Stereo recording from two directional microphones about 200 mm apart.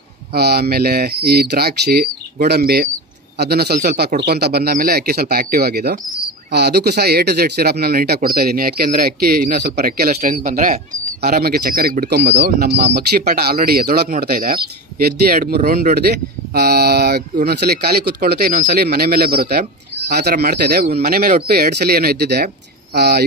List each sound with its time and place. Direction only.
0.3 s speech: 55° right (ahead or behind)